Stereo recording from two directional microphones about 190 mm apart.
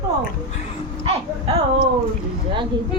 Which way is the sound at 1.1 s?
30° right (ahead or behind).